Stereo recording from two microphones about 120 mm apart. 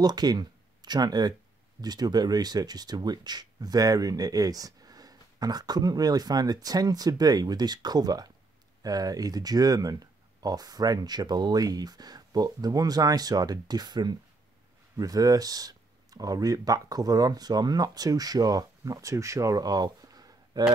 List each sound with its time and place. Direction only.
0.0 s speech: 35° right (ahead or behind)